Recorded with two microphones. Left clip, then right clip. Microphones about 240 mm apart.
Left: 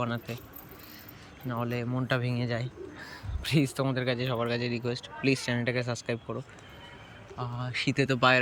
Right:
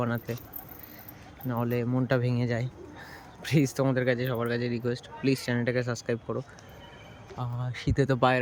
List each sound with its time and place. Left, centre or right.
0.0 s speech: centre
1.5 s speech: centre
7.3 s speech: right